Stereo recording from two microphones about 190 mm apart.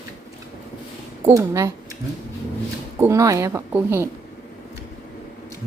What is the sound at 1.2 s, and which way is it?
Speech, 15° right (ahead or behind).